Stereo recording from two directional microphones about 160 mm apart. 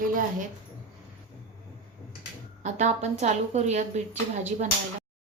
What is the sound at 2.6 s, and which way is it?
A woman's voice, 45° right (ahead or behind).